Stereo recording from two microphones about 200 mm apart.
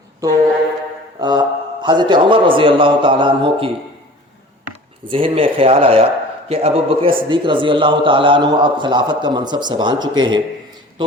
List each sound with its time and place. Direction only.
0.2 s a sound: 15° right (ahead or behind)
1.2 s a man's voice: 20° right (ahead or behind)
5.1 s a man's voice: 25° right (ahead or behind)